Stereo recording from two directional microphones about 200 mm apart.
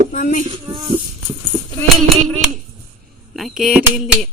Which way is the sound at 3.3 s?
Centre (ahead or behind).